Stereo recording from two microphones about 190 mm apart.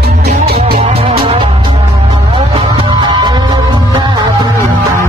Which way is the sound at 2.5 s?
25° right (ahead or behind).